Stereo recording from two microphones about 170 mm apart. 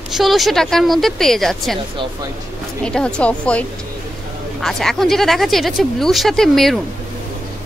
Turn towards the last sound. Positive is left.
turn(degrees=0)  # may be behind; listen again after turning